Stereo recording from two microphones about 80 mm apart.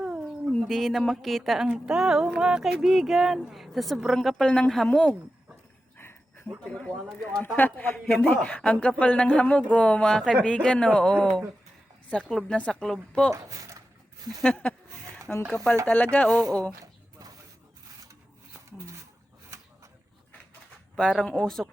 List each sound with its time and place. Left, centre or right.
0.0 s a sound: centre
0.5 s speech: centre
1.6 s speech: centre
7.3 s speech: left
13.3 s speech: right
14.4 s speech: centre
16.8 s a sound: right
20.9 s speech: centre